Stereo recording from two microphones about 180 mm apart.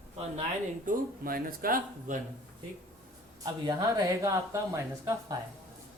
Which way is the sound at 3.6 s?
20° right (ahead or behind).